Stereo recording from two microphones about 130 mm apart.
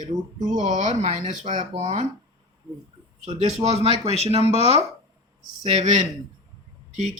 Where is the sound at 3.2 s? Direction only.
55° right (ahead or behind).